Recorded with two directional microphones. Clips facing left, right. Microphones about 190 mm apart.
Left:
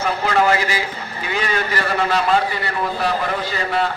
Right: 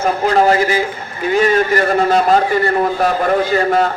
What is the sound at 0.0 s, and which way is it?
A man's voice, 35° right (ahead or behind).